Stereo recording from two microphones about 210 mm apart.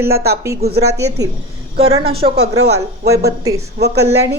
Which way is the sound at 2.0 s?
25° right (ahead or behind).